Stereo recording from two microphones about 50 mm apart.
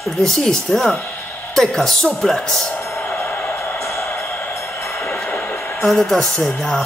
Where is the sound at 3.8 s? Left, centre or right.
Left.